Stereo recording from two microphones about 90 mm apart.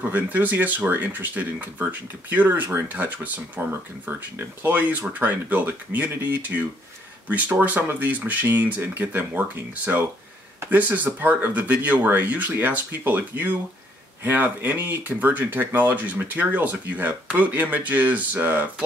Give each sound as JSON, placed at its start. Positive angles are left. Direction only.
{"t": 0.1, "sound": "speech", "side_deg": -20}